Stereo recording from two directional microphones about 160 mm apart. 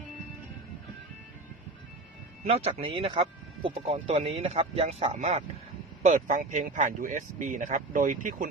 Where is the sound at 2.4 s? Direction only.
40° right (ahead or behind).